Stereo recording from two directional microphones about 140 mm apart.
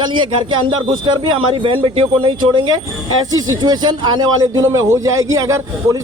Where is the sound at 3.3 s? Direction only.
25° right (ahead or behind).